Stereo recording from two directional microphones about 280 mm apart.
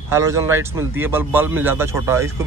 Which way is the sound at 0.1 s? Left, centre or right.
Centre.